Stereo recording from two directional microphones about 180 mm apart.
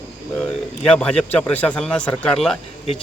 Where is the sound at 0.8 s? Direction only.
5° left (ahead or behind).